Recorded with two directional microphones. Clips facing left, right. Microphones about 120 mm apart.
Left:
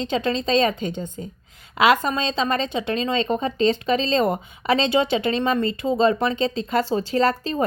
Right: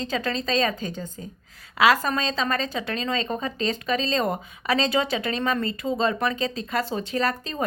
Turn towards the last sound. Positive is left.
turn(degrees=30)  # may be behind; listen again after turning